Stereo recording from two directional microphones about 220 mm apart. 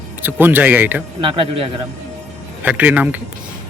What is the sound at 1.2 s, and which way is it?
Speech, 25° right (ahead or behind).